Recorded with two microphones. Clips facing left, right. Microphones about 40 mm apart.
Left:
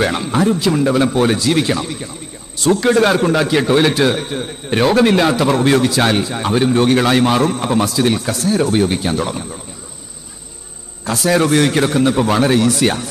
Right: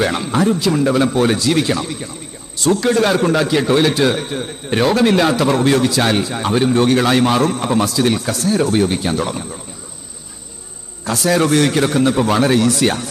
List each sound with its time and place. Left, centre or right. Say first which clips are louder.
0.0 s a man's voice: left 1 dB; centre
0.6 s a man's voice: left 1 dB; centre
2.6 s a man's voice: left 2 dB; centre
3.2 s a man's voice: left 1 dB; centre
11.0 s a man's voice: left 1 dB; centre